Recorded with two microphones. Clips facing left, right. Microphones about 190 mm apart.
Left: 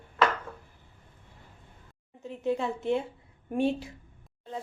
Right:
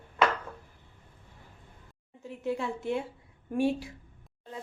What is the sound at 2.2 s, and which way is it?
A woman's voice, 20° left (ahead or behind).